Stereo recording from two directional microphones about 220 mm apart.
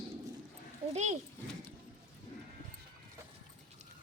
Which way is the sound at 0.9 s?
30° right (ahead or behind).